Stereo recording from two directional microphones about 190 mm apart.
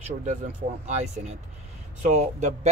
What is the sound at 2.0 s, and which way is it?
Speech, 40° right (ahead or behind).